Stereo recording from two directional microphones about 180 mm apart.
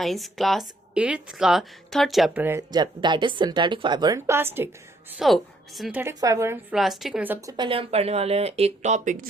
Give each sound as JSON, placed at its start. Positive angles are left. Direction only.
{"t": 0.0, "sound": "a woman's voice", "side_deg": 0}
{"t": 2.4, "sound": "a woman's voice", "side_deg": -10}
{"t": 2.7, "sound": "a woman's voice", "side_deg": -25}
{"t": 5.1, "sound": "a woman's voice", "side_deg": 0}
{"t": 6.0, "sound": "a woman's voice", "side_deg": -15}
{"t": 6.7, "sound": "a woman's voice", "side_deg": 0}
{"t": 7.5, "sound": "speech", "side_deg": -25}